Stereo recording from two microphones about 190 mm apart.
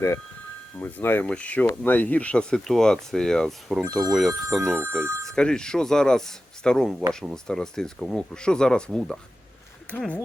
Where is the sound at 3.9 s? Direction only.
20° right (ahead or behind).